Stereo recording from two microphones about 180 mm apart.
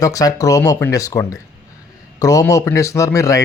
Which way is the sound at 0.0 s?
20° left (ahead or behind).